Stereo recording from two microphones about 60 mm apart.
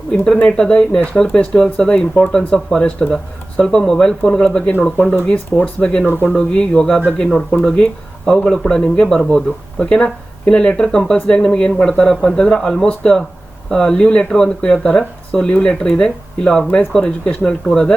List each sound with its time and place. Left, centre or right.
0.4 s speech: centre
4.6 s speech: left